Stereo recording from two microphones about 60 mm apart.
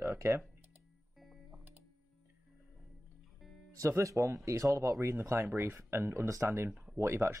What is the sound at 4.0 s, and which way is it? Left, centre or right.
Speech, right.